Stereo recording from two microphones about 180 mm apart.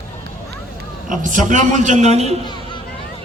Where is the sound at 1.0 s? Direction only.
45° right (ahead or behind).